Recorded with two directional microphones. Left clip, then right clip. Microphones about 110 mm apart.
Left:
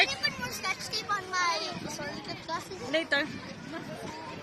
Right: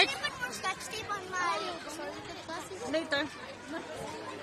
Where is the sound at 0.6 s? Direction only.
80° left.